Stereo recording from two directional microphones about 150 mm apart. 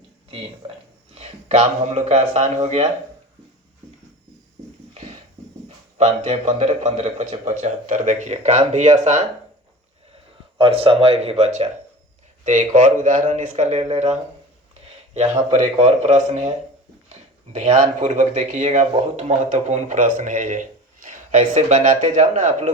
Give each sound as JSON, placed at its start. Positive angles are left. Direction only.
{"t": 1.1, "sound": "a man's voice", "side_deg": -45}
{"t": 5.6, "sound": "a man's voice", "side_deg": -45}
{"t": 10.6, "sound": "speech", "side_deg": -40}
{"t": 12.5, "sound": "a man's voice", "side_deg": -60}